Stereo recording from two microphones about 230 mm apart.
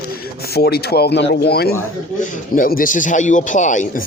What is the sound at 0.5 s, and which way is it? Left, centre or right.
Speech, left.